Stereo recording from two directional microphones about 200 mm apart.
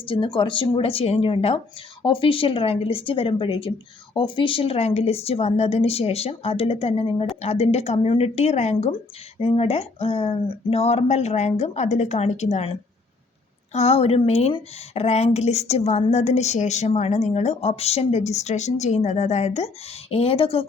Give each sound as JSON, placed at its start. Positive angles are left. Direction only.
{"t": 0.0, "sound": "speech", "side_deg": 25}
{"t": 13.7, "sound": "speech", "side_deg": 30}